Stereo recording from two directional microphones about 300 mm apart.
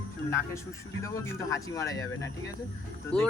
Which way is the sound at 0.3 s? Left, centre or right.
Centre.